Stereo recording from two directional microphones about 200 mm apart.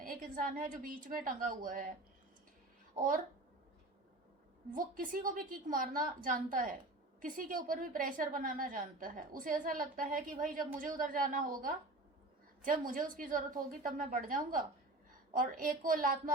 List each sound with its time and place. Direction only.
0.0 s a woman's voice: 45° right (ahead or behind)
2.9 s speech: 45° right (ahead or behind)
4.7 s a woman's voice: 45° right (ahead or behind)